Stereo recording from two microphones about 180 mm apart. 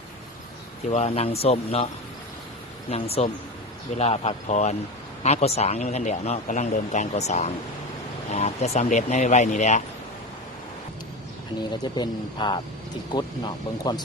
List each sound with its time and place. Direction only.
0.9 s speech: 35° left (ahead or behind)
2.9 s speech: 35° left (ahead or behind)
11.7 s speech: 25° left (ahead or behind)